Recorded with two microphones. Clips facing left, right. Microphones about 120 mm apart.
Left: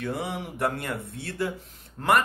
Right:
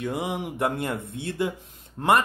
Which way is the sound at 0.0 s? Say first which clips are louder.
Right 2 dB; 15° right (ahead or behind).